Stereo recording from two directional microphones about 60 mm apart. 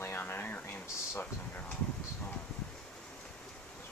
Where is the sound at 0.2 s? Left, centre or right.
Left.